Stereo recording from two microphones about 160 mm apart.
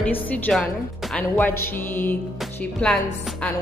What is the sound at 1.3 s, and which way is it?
A woman's voice, 15° left (ahead or behind).